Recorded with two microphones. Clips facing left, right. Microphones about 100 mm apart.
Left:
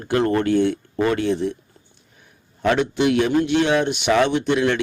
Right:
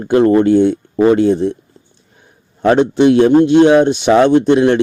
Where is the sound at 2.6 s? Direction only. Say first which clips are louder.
Right 8 dB; 35° right (ahead or behind).